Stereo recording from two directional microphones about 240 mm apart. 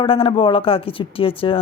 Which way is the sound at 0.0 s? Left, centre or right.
Left.